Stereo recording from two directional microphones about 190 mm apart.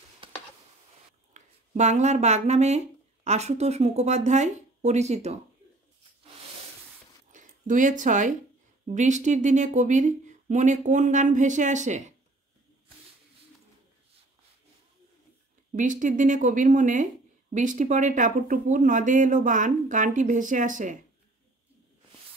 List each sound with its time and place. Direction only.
0.2 s a sound: 30° right (ahead or behind)
1.3 s speech: 40° right (ahead or behind)
7.3 s speech: 40° right (ahead or behind)
15.7 s speech: 45° right (ahead or behind)